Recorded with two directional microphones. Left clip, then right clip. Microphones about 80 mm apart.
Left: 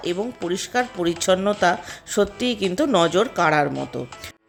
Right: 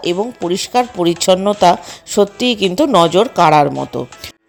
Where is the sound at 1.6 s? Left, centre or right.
Right.